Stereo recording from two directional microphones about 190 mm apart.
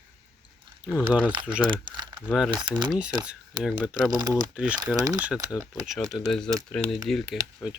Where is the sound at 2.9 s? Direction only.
5° right (ahead or behind).